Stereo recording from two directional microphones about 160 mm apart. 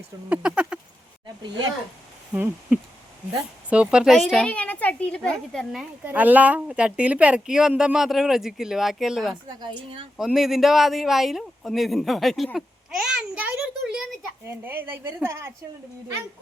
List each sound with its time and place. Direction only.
0.3 s speech: 5° right (ahead or behind)
1.4 s speech: 25° right (ahead or behind)
2.3 s a woman's voice: 10° right (ahead or behind)
6.1 s a woman's voice: 10° right (ahead or behind)
9.6 s speech: 30° right (ahead or behind)
10.2 s a woman's voice: centre (ahead or behind)